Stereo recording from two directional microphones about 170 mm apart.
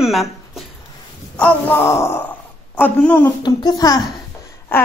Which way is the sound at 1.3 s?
10° left (ahead or behind).